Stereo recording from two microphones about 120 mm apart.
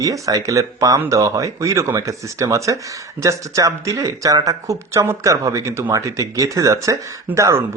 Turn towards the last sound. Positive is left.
turn(degrees=-25)  # may be behind; listen again after turning